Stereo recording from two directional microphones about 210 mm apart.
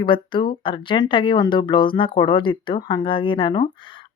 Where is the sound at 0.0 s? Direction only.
25° left (ahead or behind).